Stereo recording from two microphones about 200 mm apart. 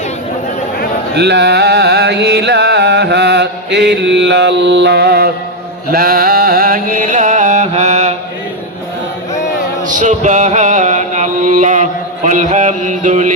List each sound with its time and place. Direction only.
1.1 s a sound: 55° right (ahead or behind)
5.9 s music: 50° right (ahead or behind)
9.8 s chant: 40° right (ahead or behind)